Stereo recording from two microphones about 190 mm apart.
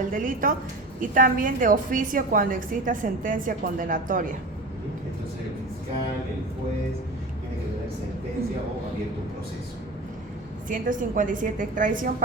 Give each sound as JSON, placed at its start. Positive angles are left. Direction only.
{"t": 0.1, "sound": "a woman's voice", "side_deg": -45}
{"t": 10.7, "sound": "a woman's voice", "side_deg": -45}